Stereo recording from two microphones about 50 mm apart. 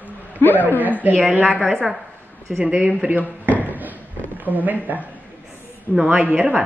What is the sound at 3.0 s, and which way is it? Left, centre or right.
Speech, right.